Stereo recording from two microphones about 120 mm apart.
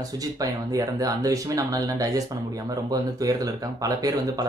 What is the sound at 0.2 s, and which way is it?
Speech, 30° right (ahead or behind).